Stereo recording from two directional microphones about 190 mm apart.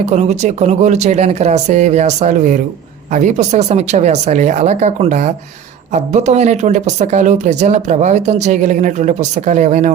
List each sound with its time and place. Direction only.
0.0 s speech: 40° right (ahead or behind)